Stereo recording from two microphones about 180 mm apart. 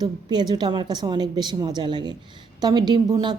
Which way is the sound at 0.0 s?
25° right (ahead or behind).